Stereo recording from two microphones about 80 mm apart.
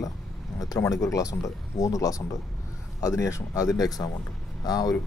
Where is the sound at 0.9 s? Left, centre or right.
Left.